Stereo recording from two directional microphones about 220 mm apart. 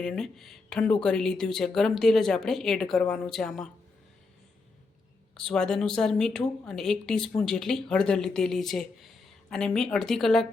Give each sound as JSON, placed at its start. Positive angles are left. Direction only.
{"t": 0.0, "sound": "a woman's voice", "side_deg": 0}
{"t": 5.4, "sound": "a woman's voice", "side_deg": 5}